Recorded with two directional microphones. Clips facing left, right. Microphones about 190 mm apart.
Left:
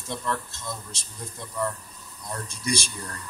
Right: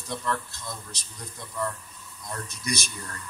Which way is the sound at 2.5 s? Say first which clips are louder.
Left 4 dB; 30° left (ahead or behind).